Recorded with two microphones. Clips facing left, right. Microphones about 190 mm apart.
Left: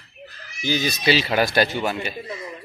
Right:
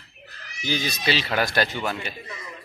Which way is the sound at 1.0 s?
10° left (ahead or behind).